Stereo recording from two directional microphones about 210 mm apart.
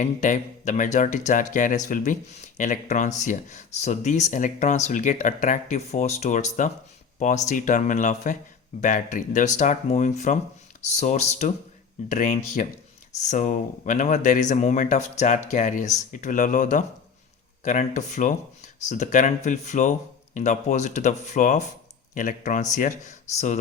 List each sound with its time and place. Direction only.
0.0 s speech: 35° left (ahead or behind)